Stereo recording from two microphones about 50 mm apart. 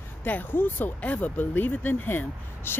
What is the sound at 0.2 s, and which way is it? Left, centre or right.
Speech, left.